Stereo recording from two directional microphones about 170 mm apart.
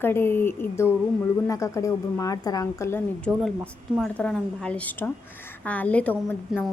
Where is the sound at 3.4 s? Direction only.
Centre (ahead or behind).